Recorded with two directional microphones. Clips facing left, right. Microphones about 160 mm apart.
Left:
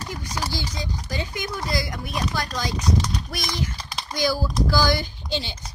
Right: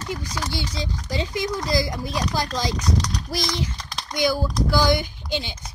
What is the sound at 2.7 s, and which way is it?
Speech, 5° left (ahead or behind).